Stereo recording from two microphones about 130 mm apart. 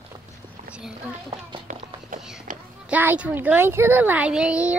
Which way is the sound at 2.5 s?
90° right.